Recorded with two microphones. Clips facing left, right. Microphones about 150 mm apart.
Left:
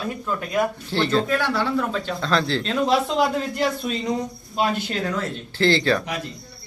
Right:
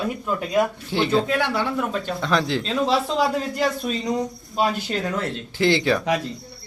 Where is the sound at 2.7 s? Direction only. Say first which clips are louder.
Left 2 dB; centre (ahead or behind).